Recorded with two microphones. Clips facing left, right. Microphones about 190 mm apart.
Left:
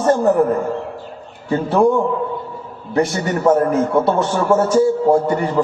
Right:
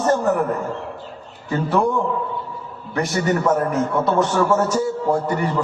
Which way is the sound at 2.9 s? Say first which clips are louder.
Left 2 dB; 30° left (ahead or behind).